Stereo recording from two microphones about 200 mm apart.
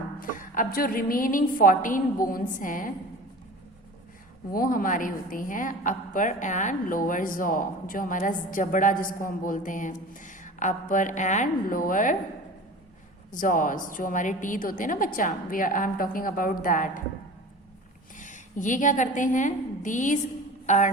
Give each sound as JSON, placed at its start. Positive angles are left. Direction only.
{"t": 0.2, "sound": "a woman's voice", "side_deg": 45}
{"t": 4.5, "sound": "a woman's voice", "side_deg": 45}
{"t": 13.3, "sound": "a woman's voice", "side_deg": 40}
{"t": 18.2, "sound": "a woman's voice", "side_deg": 40}